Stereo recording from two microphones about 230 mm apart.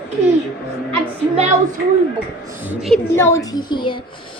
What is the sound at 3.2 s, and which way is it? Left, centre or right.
Speech, centre.